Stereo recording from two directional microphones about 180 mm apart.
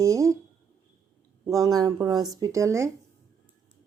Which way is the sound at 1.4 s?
20° right (ahead or behind).